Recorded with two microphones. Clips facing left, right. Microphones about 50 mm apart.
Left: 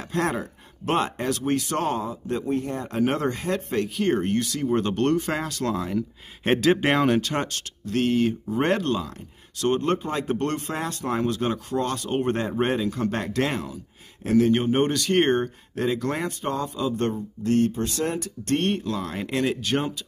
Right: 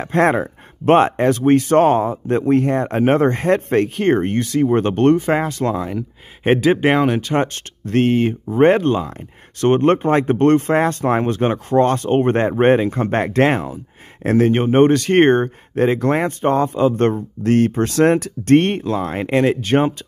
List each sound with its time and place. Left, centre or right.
0.0 s speech: right
2.4 s speech: right; by 7.4 s centre
7.8 s speech: right
9.6 s speech: right